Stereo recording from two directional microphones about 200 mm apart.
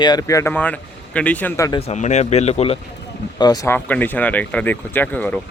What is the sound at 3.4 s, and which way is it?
Speech, 20° left (ahead or behind).